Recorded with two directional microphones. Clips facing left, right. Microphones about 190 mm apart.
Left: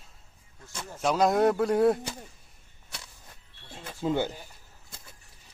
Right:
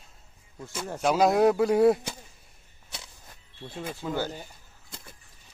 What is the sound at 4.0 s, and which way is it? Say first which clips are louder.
Speech: left 4 dB; 25° left (ahead or behind).